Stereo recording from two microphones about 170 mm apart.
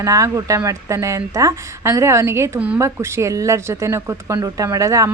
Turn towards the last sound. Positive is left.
turn(degrees=-20)  # may be behind; listen again after turning